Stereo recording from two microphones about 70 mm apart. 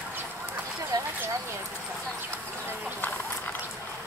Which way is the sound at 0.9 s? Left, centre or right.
Right.